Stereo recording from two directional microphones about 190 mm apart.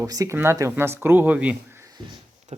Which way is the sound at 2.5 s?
35° right (ahead or behind).